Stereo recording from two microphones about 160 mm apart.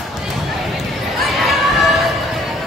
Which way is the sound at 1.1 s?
Centre (ahead or behind).